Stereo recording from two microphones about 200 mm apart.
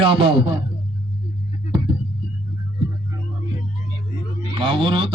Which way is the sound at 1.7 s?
25° right (ahead or behind).